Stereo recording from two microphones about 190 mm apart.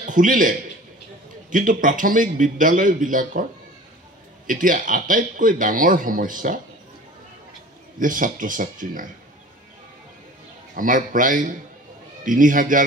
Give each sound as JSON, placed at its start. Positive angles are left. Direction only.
{"t": 0.0, "sound": "a man's voice", "side_deg": -45}
{"t": 4.5, "sound": "a man's voice", "side_deg": -45}
{"t": 8.0, "sound": "a man's voice", "side_deg": -45}
{"t": 10.8, "sound": "a man's voice", "side_deg": -45}